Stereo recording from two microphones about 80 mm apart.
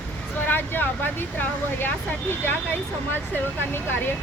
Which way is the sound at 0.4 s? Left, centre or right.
Left.